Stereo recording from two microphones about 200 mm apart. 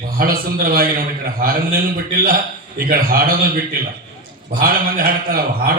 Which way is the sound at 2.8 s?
45° right (ahead or behind).